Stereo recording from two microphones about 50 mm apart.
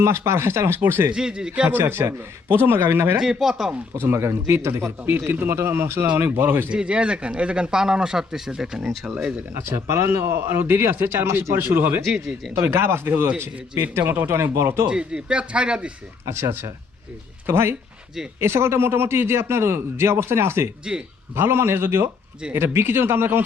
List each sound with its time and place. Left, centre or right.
0.0 s a man's voice: right
1.1 s speech: centre
1.7 s a man's voice: right
3.2 s speech: centre
4.0 s a man's voice: right
4.8 s a man's voice: right
6.7 s speech: right
9.6 s a man's voice: right
12.5 s a man's voice: right
14.8 s speech: centre
16.3 s a man's voice: right
20.9 s speech: centre
21.3 s a man's voice: right